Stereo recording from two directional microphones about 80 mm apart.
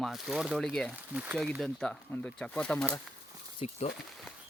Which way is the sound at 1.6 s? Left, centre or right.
Centre.